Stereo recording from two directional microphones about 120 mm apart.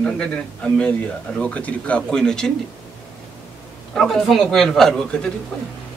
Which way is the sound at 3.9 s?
Centre (ahead or behind).